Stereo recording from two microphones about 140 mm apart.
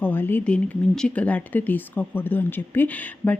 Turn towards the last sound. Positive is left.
turn(degrees=10)  # may be behind; listen again after turning